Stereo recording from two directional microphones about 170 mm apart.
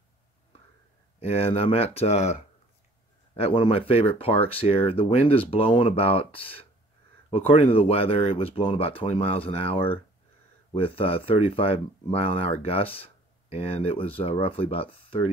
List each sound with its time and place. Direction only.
1.2 s speech: 35° left (ahead or behind)
3.3 s speech: 35° left (ahead or behind)